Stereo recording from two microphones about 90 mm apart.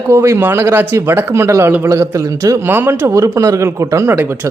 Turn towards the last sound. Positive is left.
turn(degrees=-25)  # may be behind; listen again after turning